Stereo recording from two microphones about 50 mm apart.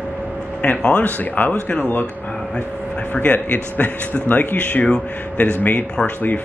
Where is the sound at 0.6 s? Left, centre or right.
Left.